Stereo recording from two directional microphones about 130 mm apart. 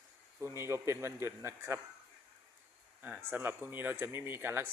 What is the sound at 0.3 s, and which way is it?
A man's voice, 20° right (ahead or behind).